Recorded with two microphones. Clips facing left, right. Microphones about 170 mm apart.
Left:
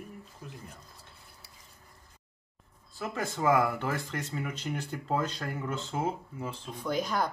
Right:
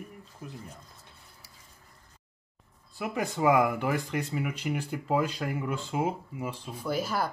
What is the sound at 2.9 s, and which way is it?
Speech, 15° right (ahead or behind).